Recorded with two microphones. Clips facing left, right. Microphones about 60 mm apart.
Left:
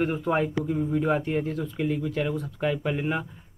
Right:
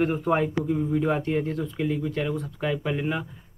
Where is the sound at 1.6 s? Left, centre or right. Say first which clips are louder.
Even; left.